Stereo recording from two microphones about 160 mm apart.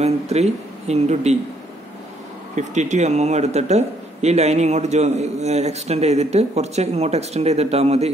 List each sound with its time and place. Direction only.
0.0 s speech: 40° right (ahead or behind)
2.5 s speech: 50° right (ahead or behind)